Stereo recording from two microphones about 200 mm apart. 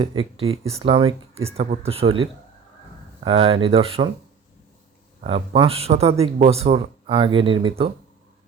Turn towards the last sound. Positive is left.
turn(degrees=-25)  # may be behind; listen again after turning